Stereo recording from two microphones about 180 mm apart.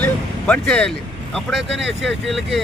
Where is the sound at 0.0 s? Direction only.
10° left (ahead or behind).